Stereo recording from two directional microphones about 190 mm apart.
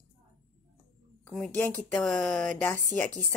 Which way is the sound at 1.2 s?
Centre (ahead or behind).